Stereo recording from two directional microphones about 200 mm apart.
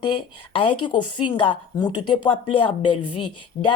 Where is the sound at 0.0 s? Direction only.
25° left (ahead or behind).